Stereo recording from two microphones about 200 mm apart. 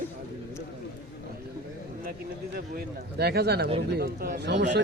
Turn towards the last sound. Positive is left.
turn(degrees=-60)  # may be behind; listen again after turning